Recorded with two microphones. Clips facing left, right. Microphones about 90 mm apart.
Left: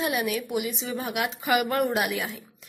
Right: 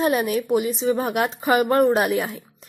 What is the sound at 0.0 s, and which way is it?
Speech, 40° right (ahead or behind).